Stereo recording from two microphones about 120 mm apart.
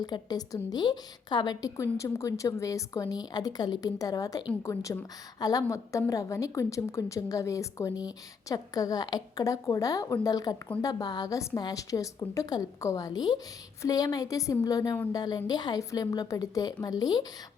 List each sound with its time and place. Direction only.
0.0 s a woman's voice: 35° left (ahead or behind)